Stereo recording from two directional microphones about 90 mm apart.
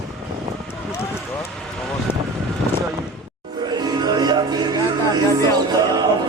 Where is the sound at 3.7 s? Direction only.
50° right (ahead or behind).